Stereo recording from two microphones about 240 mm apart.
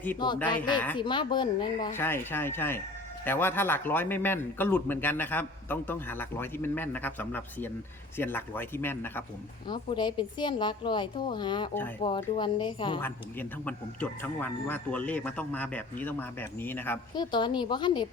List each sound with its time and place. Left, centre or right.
0.4 s speech: centre
13.0 s speech: centre